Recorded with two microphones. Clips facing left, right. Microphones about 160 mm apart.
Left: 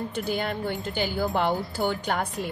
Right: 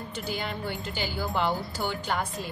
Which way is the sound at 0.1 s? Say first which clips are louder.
Left 5 dB; 55° left (ahead or behind).